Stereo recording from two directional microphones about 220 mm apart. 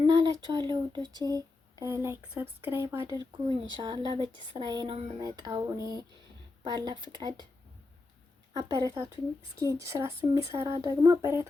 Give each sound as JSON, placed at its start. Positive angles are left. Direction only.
{"t": 0.0, "sound": "speech", "side_deg": -20}
{"t": 8.5, "sound": "speech", "side_deg": -15}